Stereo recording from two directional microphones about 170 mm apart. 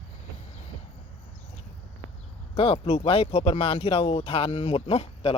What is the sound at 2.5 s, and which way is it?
Speech, 35° left (ahead or behind).